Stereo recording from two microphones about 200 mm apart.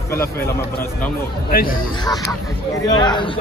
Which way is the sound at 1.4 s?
45° left (ahead or behind).